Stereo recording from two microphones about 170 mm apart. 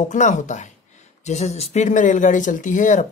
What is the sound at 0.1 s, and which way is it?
Speech, 45° left (ahead or behind).